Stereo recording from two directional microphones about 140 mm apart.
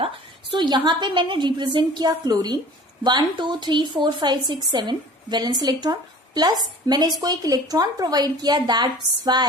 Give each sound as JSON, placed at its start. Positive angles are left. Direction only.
{"t": 0.5, "sound": "a woman's voice", "side_deg": -30}